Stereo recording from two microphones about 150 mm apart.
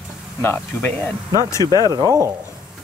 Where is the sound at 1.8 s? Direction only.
25° right (ahead or behind).